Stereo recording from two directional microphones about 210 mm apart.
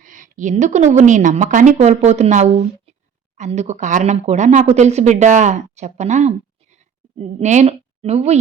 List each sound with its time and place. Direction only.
0.0 s a woman's voice: 40° right (ahead or behind)